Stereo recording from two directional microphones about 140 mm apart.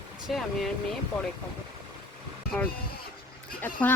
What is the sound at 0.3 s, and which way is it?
Speech, centre (ahead or behind).